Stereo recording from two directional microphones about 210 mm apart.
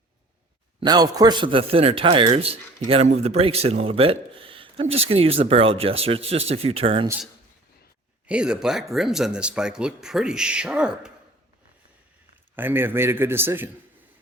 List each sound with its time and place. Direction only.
0.8 s a man's voice: 20° right (ahead or behind)
8.3 s speech: 5° right (ahead or behind)
12.5 s a man's voice: 10° right (ahead or behind)